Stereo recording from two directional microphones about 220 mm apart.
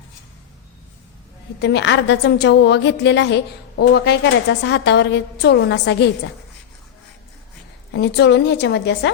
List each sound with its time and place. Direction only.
1.5 s a woman's voice: 50° left (ahead or behind)
7.9 s a woman's voice: 50° left (ahead or behind)